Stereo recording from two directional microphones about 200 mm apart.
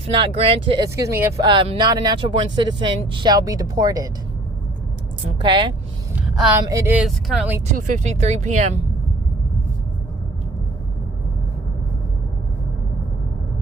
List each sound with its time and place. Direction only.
0.1 s speech: 25° right (ahead or behind)
1.5 s speech: 25° right (ahead or behind)
5.4 s speech: 25° right (ahead or behind)
6.7 s speech: 15° right (ahead or behind)
7.7 s speech: 40° right (ahead or behind)